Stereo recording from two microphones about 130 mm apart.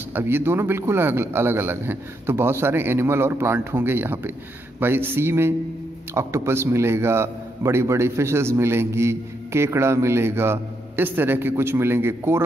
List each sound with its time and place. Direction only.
0.1 s a man's voice: 15° right (ahead or behind)